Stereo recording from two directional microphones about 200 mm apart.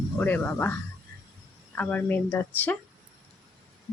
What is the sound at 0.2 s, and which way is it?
Speech, 10° left (ahead or behind).